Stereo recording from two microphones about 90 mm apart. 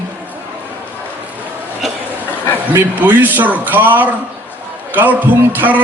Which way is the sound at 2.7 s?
20° right (ahead or behind).